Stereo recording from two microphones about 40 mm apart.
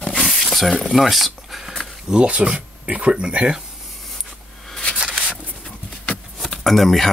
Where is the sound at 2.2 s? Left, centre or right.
Right.